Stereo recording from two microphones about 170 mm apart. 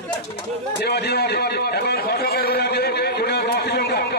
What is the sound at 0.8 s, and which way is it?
A man's voice, 75° left (ahead or behind).